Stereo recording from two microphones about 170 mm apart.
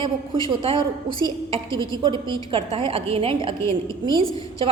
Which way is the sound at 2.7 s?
30° right (ahead or behind).